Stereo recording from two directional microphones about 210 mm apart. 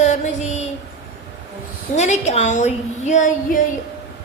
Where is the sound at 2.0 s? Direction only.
35° left (ahead or behind).